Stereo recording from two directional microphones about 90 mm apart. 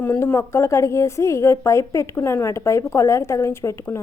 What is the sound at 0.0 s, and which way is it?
A woman's voice, 25° left (ahead or behind).